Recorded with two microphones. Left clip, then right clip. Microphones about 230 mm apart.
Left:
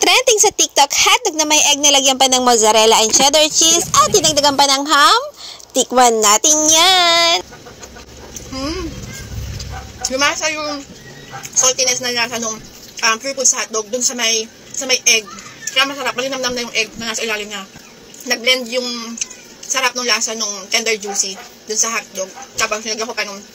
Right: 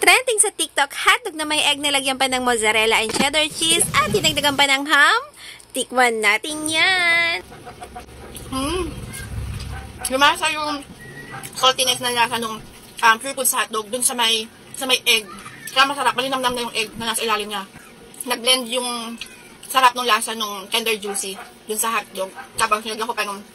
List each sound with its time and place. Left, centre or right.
0.0 s a sound: left
0.6 s speech: centre
3.5 s speech: centre
4.1 s a woman's voice: centre
8.5 s speech: centre
10.0 s a woman's voice: centre